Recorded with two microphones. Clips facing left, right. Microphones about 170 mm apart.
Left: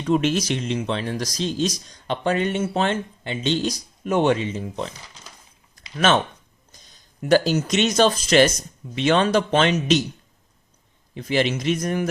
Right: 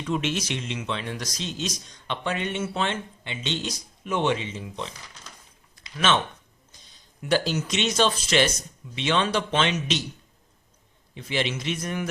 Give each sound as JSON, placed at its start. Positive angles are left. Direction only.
{"t": 0.0, "sound": "speech", "side_deg": 40}
{"t": 5.7, "sound": "a sound", "side_deg": 45}
{"t": 7.2, "sound": "speech", "side_deg": 45}
{"t": 11.1, "sound": "speech", "side_deg": 40}